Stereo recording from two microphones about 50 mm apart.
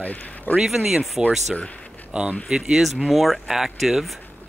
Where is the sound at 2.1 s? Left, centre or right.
Centre.